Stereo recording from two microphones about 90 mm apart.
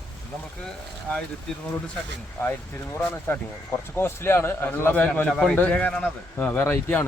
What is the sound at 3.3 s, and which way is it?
A man's voice, 25° left (ahead or behind).